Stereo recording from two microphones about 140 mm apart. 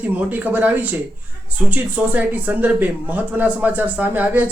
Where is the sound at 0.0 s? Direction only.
10° right (ahead or behind).